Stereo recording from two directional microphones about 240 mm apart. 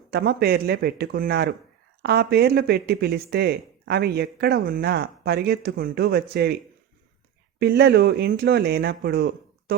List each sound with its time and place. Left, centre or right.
0.1 s speech: right
7.6 s speech: right